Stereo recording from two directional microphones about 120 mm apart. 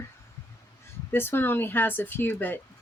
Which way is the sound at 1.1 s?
20° left (ahead or behind).